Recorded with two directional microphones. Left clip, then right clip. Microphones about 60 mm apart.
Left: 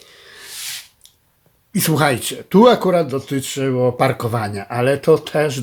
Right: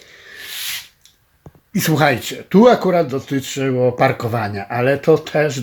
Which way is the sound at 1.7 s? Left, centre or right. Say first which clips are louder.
Right 1 dB; left.